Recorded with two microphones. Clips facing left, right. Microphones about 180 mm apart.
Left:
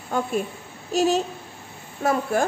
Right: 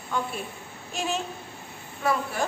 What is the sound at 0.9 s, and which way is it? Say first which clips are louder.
A woman's voice: left 9 dB; 40° left (ahead or behind).